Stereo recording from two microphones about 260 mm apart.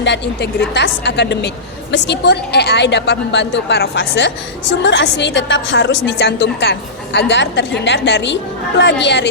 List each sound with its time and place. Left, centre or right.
0.7 s a woman's voice: left